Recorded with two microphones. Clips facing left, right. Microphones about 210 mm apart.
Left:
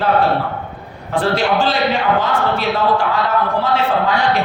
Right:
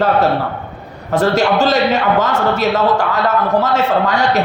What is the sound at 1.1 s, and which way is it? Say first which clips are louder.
A man's voice: right 3 dB; 40° right (ahead or behind).